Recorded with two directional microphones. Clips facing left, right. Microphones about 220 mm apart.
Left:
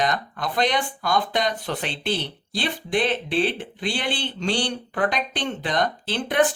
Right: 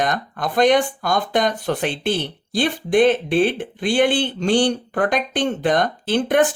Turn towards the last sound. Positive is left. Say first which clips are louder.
# right 5 dB
turn(degrees=-50)  # may be behind; listen again after turning